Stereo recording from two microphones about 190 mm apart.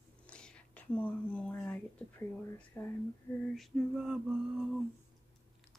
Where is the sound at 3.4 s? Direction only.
Centre (ahead or behind).